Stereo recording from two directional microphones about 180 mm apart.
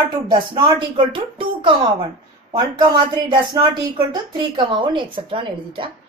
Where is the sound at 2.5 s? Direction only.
20° right (ahead or behind).